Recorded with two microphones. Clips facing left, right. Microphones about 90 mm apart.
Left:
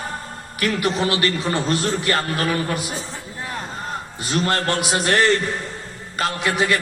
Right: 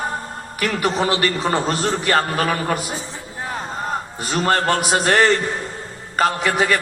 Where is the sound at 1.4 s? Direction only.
45° right (ahead or behind).